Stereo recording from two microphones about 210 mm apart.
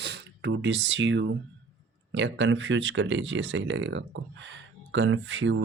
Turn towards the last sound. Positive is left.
turn(degrees=-65)  # may be behind; listen again after turning